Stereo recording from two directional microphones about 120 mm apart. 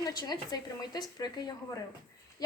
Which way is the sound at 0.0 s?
35° left (ahead or behind).